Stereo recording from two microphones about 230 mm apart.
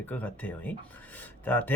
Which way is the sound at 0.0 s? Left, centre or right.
Centre.